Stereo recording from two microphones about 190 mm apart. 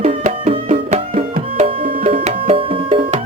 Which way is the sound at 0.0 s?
35° right (ahead or behind).